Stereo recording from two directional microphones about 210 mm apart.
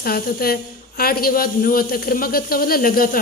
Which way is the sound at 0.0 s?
45° left (ahead or behind).